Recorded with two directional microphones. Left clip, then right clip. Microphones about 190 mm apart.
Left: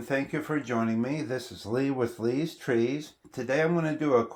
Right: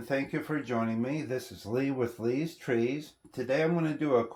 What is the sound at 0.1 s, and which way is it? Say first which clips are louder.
Speech: left 2 dB; 30° left (ahead or behind).